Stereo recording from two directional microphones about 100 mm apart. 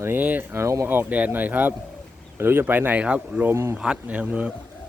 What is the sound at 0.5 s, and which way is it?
Speech, 30° right (ahead or behind).